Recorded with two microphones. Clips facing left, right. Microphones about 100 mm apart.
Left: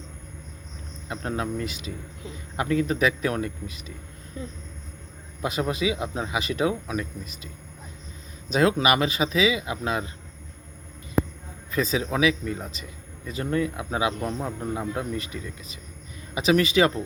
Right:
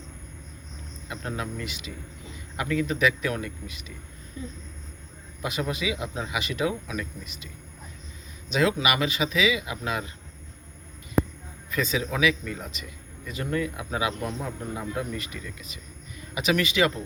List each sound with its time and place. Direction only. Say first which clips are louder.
1.0 s speech: left 4 dB; 30° left (ahead or behind)
5.4 s speech: left 4 dB; 30° left (ahead or behind)
11.7 s speech: left 2 dB; 35° left (ahead or behind)